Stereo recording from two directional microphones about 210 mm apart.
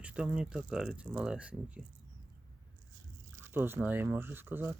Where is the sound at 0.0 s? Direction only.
5° right (ahead or behind).